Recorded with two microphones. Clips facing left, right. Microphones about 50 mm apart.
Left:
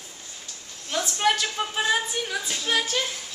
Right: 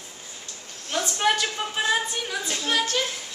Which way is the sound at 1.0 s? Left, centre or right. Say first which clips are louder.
Even; centre.